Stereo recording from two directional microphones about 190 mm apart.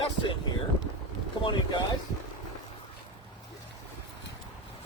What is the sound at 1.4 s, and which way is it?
Speech, 25° left (ahead or behind).